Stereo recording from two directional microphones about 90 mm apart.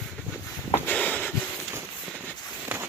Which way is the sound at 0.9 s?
15° left (ahead or behind).